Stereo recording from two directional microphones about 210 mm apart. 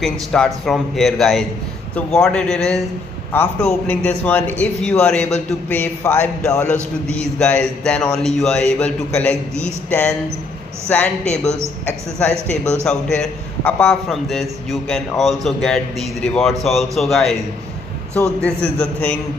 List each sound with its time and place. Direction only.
0.0 s a man's voice: centre (ahead or behind)